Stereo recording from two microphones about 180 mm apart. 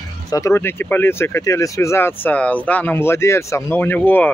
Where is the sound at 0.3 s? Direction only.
15° left (ahead or behind).